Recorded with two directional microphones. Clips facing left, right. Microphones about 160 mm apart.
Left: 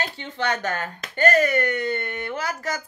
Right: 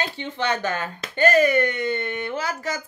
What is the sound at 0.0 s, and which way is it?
Speech, 25° right (ahead or behind).